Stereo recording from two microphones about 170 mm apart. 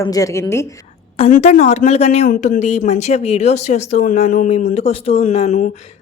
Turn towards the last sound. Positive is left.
turn(degrees=40)  # may be behind; listen again after turning